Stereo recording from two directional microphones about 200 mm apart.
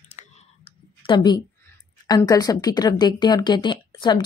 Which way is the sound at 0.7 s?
25° left (ahead or behind).